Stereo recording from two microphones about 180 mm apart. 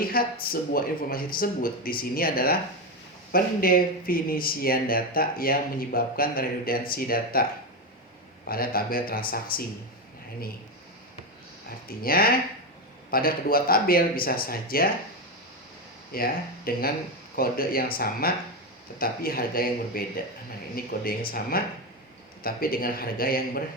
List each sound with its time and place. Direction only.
0.0 s speech: 55° left (ahead or behind)
8.4 s speech: 55° left (ahead or behind)
11.9 s speech: 55° left (ahead or behind)
16.1 s speech: 55° left (ahead or behind)